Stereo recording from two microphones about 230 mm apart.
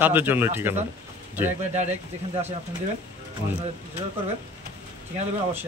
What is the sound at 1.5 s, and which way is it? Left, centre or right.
Speech, right.